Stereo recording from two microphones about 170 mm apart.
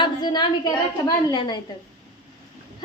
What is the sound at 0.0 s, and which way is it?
A woman's voice, 25° left (ahead or behind).